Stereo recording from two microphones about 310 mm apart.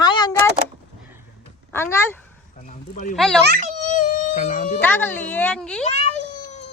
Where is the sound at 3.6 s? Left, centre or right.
Left.